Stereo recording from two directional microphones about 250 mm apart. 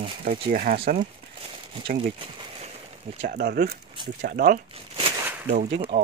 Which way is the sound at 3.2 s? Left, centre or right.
Right.